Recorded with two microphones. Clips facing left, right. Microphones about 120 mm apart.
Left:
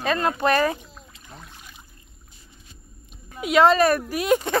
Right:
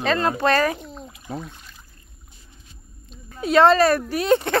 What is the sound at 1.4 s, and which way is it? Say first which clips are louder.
Speech: right 6 dB; 10° left (ahead or behind).